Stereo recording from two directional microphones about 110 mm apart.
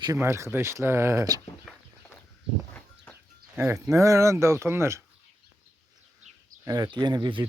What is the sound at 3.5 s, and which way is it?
Speech, 25° right (ahead or behind).